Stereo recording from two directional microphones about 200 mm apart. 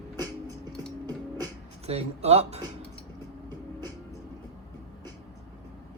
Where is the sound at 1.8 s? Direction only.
30° right (ahead or behind).